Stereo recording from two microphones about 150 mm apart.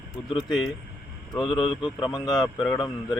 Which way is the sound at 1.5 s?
35° left (ahead or behind).